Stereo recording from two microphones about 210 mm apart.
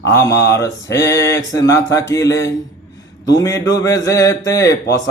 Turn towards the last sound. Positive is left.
turn(degrees=15)  # may be behind; listen again after turning